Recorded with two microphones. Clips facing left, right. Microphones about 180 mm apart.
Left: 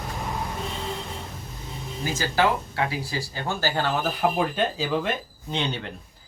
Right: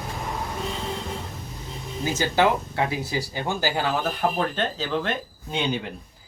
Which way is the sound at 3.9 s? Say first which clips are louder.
Even; 5° left (ahead or behind).